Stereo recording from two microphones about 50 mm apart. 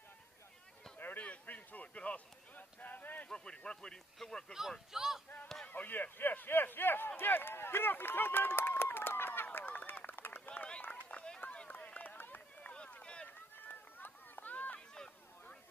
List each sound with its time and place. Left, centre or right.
0.9 s a sound: left
3.3 s a sound: centre
4.2 s speech: centre
4.6 s speech: centre
5.7 s speech: left
7.2 s run: left
10.8 s run: left
12.6 s run: left
13.6 s run: left